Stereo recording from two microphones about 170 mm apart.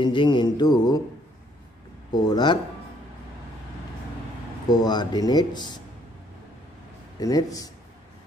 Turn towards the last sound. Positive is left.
turn(degrees=20)  # may be behind; listen again after turning